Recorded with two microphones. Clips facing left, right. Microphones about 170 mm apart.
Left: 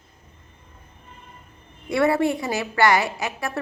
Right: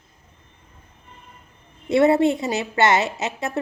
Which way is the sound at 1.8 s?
20° right (ahead or behind).